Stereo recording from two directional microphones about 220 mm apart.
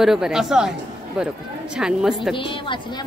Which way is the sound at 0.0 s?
Centre (ahead or behind).